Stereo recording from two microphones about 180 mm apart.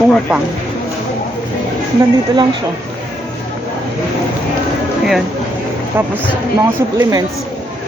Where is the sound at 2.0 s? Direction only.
25° right (ahead or behind).